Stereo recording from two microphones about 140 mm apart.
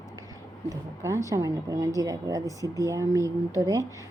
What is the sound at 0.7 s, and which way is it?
A woman's voice, 20° right (ahead or behind).